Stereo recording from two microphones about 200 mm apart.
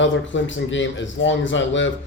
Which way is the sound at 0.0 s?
70° left (ahead or behind).